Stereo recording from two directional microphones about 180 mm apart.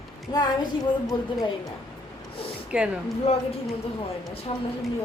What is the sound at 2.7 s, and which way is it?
Speech, 5° right (ahead or behind).